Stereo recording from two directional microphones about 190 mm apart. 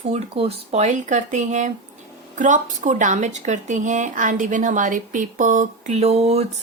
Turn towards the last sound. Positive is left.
turn(degrees=-35)  # may be behind; listen again after turning